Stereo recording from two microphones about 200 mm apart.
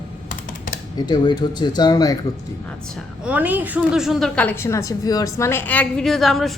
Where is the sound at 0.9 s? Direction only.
20° left (ahead or behind).